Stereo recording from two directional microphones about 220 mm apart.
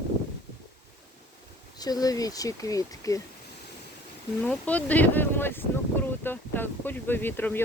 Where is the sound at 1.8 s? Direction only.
15° left (ahead or behind).